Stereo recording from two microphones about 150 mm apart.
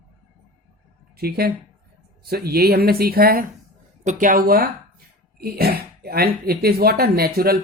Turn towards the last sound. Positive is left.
turn(degrees=-90)